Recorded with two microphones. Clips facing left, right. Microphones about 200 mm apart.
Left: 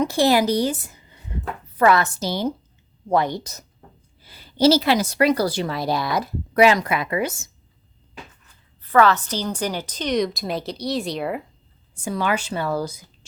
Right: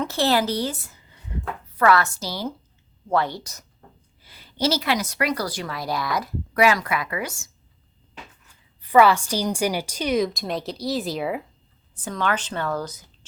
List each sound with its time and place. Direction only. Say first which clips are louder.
0.0 s speech: left 4 dB; 15° left (ahead or behind)
1.3 s a woman's voice: left 1 dB; 25° left (ahead or behind)
4.3 s a woman's voice: left 8 dB; 30° left (ahead or behind)
8.8 s a woman's voice: right 1 dB; 10° right (ahead or behind)
12.0 s speech: left 2 dB; 10° left (ahead or behind)